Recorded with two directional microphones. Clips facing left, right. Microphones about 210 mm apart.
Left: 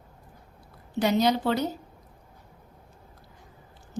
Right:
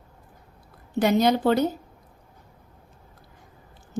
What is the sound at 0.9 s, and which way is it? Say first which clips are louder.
Speech: right 3 dB; 50° right (ahead or behind).